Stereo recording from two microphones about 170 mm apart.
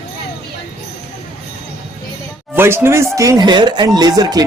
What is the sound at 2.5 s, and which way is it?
Speech, 15° right (ahead or behind).